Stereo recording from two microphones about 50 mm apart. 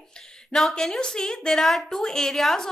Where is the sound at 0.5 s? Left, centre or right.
Centre.